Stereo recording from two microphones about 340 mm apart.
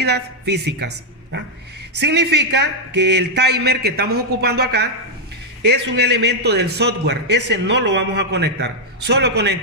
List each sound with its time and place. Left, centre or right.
0.0 s a woman's voice: right
5.9 s a man's voice: right